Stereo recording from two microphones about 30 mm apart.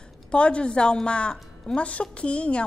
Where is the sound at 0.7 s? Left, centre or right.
Left.